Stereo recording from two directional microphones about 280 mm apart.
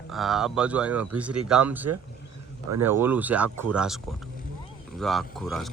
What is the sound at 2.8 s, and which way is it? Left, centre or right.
Speech, centre.